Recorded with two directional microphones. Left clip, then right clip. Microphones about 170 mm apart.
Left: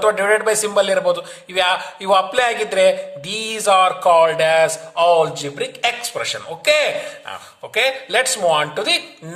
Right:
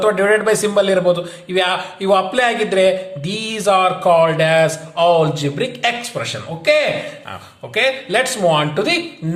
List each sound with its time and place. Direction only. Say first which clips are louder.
0.0 s a man's voice: right 1 dB; 30° left (ahead or behind)